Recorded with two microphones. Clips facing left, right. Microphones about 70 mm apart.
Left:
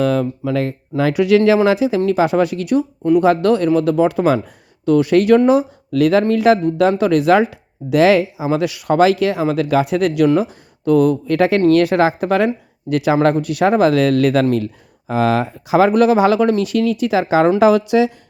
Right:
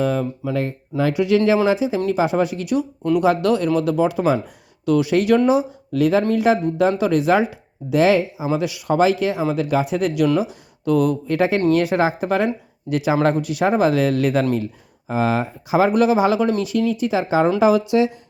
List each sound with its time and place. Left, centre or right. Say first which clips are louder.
0.0 s speech: left 4 dB; left
3.2 s speech: left 3 dB; left
10.2 s speech: left 4 dB; left
11.3 s speech: left 4 dB; left
17.6 s speech: left 3 dB; left